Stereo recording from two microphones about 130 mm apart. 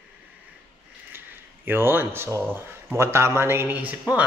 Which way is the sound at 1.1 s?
15° right (ahead or behind).